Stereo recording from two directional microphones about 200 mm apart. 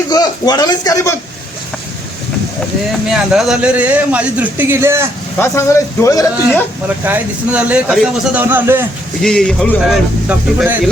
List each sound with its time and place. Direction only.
0.1 s a man's voice: 20° left (ahead or behind)
3.1 s speech: centre (ahead or behind)
5.4 s a man's voice: 15° left (ahead or behind)
6.8 s speech: 10° right (ahead or behind)
9.2 s speech: 5° left (ahead or behind)